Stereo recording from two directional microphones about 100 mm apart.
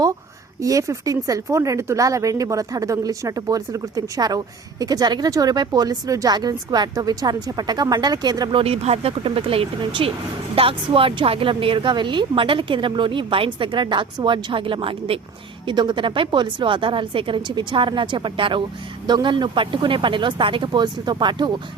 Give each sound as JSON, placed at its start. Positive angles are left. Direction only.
{"t": 0.6, "sound": "speech", "side_deg": -35}
{"t": 8.5, "sound": "a woman's voice", "side_deg": -85}
{"t": 15.6, "sound": "a woman's voice", "side_deg": -50}